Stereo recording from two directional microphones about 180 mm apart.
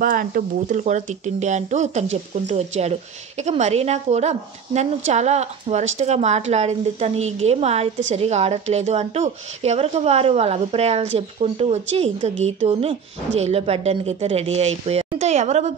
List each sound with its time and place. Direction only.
0.0 s a woman's voice: 50° right (ahead or behind)